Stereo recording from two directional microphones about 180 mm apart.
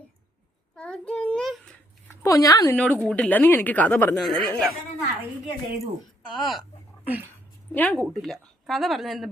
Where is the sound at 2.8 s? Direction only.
5° left (ahead or behind).